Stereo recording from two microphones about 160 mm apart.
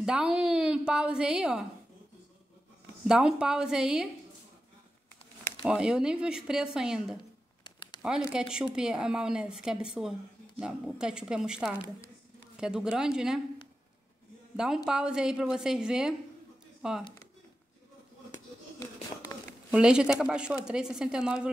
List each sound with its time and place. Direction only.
0.0 s speech: 5° right (ahead or behind)
3.1 s speech: 5° right (ahead or behind)
5.6 s speech: 5° right (ahead or behind)
7.6 s a sound: 30° left (ahead or behind)
8.3 s speech: 5° right (ahead or behind)
14.9 s speech: 5° right (ahead or behind)
19.7 s speech: 5° right (ahead or behind)